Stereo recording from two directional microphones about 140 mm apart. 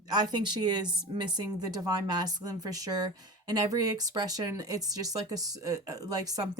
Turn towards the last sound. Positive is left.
turn(degrees=-25)  # may be behind; listen again after turning